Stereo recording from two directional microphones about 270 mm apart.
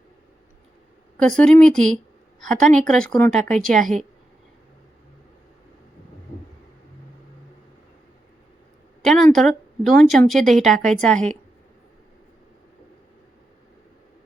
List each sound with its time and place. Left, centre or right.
1.1 s speech: centre
9.0 s speech: centre